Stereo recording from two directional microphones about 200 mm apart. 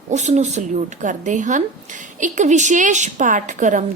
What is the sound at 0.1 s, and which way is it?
A woman's voice, 35° right (ahead or behind).